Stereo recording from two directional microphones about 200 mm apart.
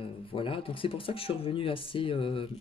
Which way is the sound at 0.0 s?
25° left (ahead or behind).